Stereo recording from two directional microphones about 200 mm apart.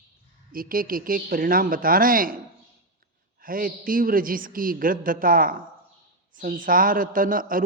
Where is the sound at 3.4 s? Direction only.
45° right (ahead or behind).